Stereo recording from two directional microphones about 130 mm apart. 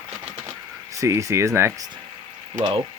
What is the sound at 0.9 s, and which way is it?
Speech, 25° right (ahead or behind).